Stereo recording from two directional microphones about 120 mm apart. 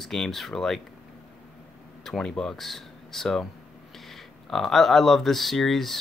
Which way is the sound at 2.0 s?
5° left (ahead or behind).